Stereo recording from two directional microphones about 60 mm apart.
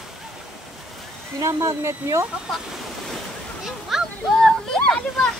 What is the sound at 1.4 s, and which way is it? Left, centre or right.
Speech, right.